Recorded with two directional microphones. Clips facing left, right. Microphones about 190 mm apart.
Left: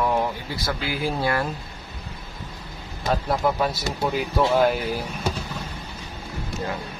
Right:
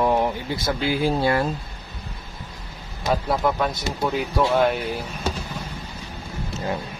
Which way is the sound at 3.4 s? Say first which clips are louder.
Even; 5° left (ahead or behind).